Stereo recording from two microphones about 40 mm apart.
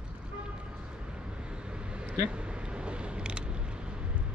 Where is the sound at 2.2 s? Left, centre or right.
Right.